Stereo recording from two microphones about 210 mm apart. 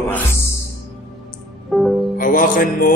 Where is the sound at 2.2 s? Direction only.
40° left (ahead or behind).